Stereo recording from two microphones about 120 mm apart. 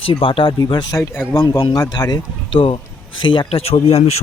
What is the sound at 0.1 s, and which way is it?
Speech, 50° left (ahead or behind).